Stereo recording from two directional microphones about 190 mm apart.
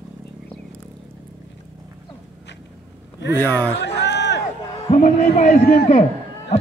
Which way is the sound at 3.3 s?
10° left (ahead or behind).